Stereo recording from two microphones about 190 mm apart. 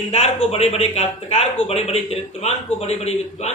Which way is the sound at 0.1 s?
35° left (ahead or behind).